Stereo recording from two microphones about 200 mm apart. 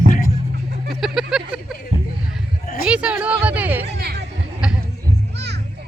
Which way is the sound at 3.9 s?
55° right (ahead or behind).